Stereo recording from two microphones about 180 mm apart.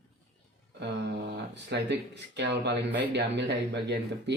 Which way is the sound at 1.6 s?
70° right (ahead or behind).